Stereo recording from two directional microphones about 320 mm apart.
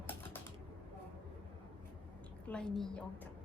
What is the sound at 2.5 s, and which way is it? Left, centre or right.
Speech, centre.